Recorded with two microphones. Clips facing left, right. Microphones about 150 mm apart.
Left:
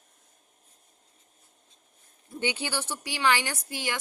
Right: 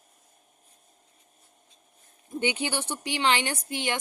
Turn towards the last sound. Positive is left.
turn(degrees=-20)  # may be behind; listen again after turning